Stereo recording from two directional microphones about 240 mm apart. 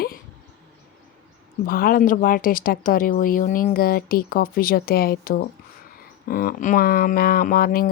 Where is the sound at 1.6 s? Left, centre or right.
Left.